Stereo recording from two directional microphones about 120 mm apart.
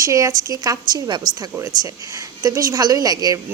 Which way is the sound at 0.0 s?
30° right (ahead or behind).